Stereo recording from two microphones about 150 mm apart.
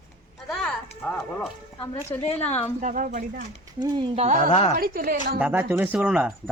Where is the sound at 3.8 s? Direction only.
30° right (ahead or behind).